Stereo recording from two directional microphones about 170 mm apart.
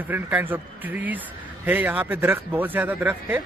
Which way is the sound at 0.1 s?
10° right (ahead or behind).